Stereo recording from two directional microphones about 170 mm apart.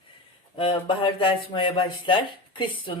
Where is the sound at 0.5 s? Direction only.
30° left (ahead or behind).